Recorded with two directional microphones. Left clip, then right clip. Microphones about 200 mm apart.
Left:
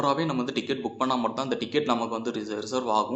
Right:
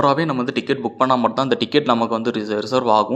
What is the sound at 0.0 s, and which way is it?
A man's voice, 40° right (ahead or behind).